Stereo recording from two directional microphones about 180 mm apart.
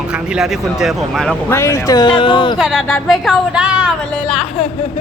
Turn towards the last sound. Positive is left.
turn(degrees=5)  # may be behind; listen again after turning